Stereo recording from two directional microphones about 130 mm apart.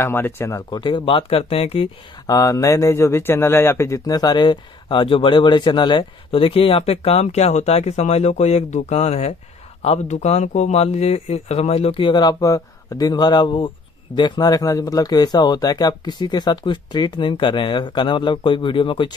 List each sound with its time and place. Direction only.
0.0 s speech: 20° left (ahead or behind)
0.7 s speech: 35° left (ahead or behind)
2.2 s speech: 25° left (ahead or behind)